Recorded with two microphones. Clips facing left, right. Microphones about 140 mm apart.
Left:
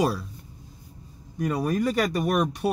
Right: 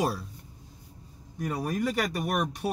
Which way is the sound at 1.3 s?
90° left.